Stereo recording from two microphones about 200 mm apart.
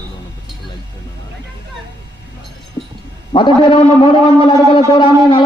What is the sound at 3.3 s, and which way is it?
Speech, 25° left (ahead or behind).